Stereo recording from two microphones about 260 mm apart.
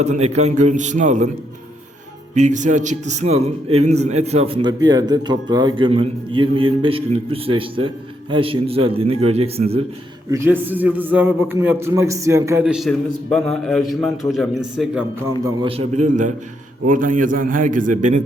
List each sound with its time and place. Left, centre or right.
0.0 s a man's voice: right
2.3 s a man's voice: right
10.3 s a man's voice: centre
15.4 s a man's voice: right